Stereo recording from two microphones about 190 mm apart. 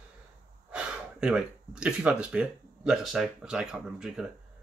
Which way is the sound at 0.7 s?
5° right (ahead or behind).